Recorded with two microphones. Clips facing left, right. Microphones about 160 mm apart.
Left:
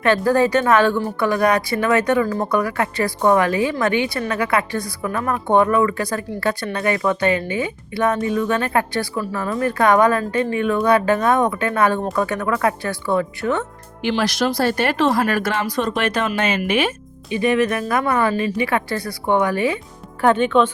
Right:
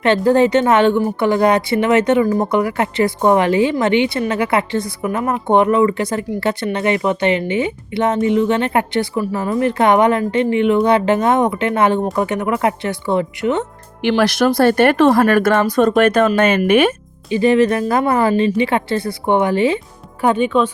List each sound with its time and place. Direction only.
0.0 s a woman's voice: 25° right (ahead or behind)
14.0 s speech: 60° right (ahead or behind)
17.2 s a woman's voice: 30° right (ahead or behind)
20.2 s speech: 10° right (ahead or behind)